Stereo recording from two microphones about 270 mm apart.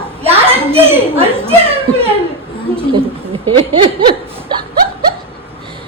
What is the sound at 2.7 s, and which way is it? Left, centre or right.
A woman's voice, right.